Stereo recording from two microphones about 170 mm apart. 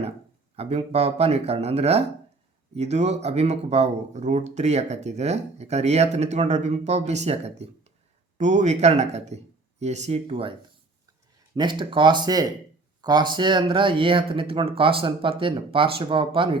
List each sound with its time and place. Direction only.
0.5 s speech: 35° right (ahead or behind)
11.5 s speech: 25° right (ahead or behind)